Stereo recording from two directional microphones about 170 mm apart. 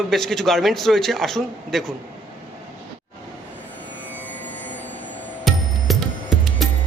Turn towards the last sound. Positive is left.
turn(degrees=0)  # may be behind; listen again after turning